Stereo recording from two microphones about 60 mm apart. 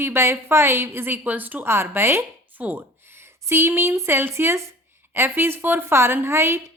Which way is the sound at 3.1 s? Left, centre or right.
Right.